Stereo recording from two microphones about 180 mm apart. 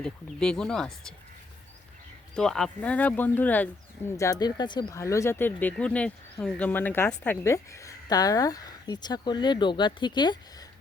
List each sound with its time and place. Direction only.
0.0 s speech: 5° left (ahead or behind)
2.3 s speech: 5° left (ahead or behind)
4.2 s speech: 20° left (ahead or behind)